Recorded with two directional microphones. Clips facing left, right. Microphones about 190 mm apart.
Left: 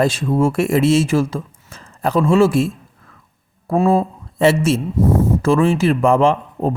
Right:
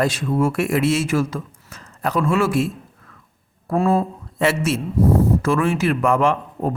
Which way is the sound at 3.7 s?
20° left (ahead or behind).